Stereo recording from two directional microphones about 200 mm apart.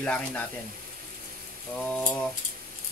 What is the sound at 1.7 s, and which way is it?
Speech, 5° left (ahead or behind).